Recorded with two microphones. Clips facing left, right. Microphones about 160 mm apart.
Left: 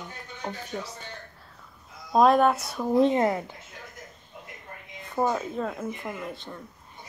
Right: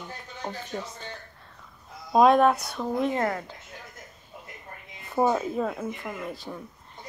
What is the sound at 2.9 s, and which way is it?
Speech, 20° left (ahead or behind).